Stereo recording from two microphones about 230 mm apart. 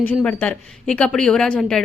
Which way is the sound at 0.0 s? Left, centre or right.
Centre.